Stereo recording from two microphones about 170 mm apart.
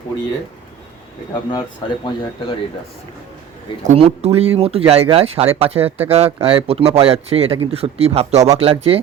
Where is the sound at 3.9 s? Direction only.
40° right (ahead or behind).